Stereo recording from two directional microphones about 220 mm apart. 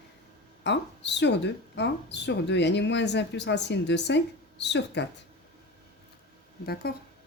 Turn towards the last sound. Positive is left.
turn(degrees=45)  # may be behind; listen again after turning